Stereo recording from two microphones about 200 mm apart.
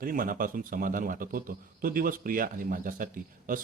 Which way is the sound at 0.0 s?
45° right (ahead or behind).